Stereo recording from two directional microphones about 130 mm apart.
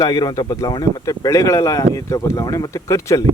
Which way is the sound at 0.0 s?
30° left (ahead or behind).